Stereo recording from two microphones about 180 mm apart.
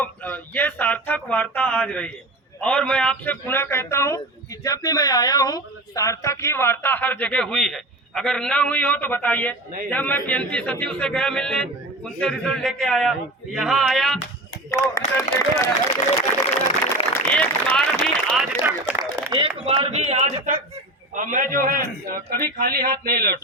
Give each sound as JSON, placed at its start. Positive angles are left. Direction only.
{"t": 0.0, "sound": "a man's voice", "side_deg": 10}
{"t": 14.7, "sound": "speech", "side_deg": 15}
{"t": 17.2, "sound": "speech", "side_deg": 10}
{"t": 18.6, "sound": "speech", "side_deg": -10}
{"t": 19.3, "sound": "a man's voice", "side_deg": -30}